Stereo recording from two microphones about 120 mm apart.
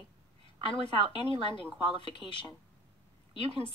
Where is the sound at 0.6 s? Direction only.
45° left (ahead or behind).